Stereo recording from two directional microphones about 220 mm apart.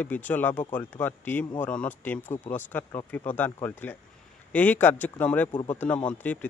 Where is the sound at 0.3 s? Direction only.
10° left (ahead or behind).